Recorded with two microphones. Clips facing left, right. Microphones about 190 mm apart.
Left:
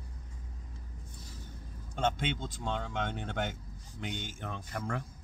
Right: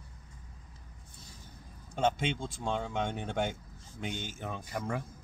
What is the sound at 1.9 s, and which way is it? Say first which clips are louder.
Speech: right 2 dB; 10° right (ahead or behind).